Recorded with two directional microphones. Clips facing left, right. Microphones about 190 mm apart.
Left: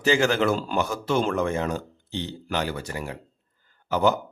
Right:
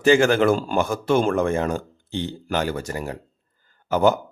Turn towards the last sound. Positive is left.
turn(degrees=-50)  # may be behind; listen again after turning